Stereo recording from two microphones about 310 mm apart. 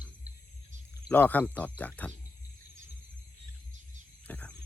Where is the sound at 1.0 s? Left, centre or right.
Centre.